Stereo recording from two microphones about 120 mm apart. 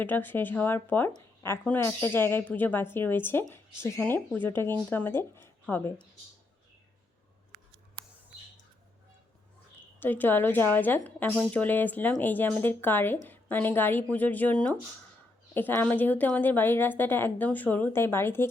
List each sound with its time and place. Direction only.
0.0 s a woman's voice: 15° left (ahead or behind)
1.1 s a woman's voice: 25° left (ahead or behind)
10.0 s a woman's voice: 15° left (ahead or behind)